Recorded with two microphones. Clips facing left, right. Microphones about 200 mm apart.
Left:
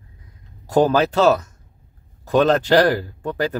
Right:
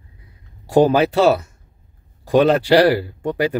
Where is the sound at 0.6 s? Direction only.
10° right (ahead or behind).